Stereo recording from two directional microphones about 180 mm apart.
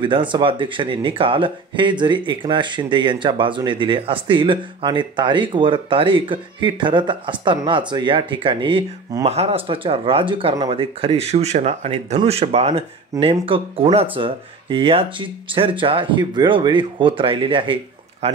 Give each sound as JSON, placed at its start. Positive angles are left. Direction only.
{"t": 0.0, "sound": "speech", "side_deg": -25}